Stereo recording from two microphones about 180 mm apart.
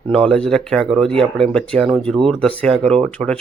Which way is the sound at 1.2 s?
30° right (ahead or behind).